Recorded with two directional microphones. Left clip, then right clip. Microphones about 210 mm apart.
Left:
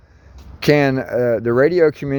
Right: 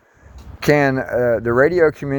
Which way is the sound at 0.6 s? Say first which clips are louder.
Even; 65° left (ahead or behind).